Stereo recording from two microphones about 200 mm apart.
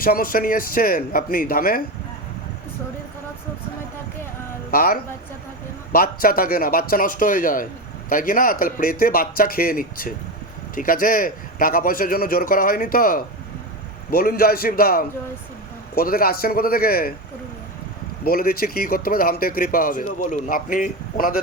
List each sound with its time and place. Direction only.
0.0 s speech: 45° left (ahead or behind)
4.7 s speech: 45° left (ahead or behind)
18.3 s speech: 50° left (ahead or behind)